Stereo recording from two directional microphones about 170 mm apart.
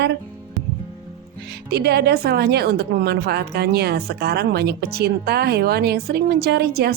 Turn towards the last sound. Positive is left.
turn(degrees=-70)  # may be behind; listen again after turning